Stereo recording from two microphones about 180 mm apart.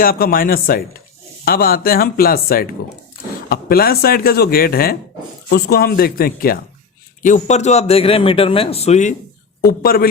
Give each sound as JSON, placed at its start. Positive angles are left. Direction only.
{"t": 0.0, "sound": "speech", "side_deg": 55}
{"t": 7.2, "sound": "a man's voice", "side_deg": 45}
{"t": 9.6, "sound": "speech", "side_deg": 55}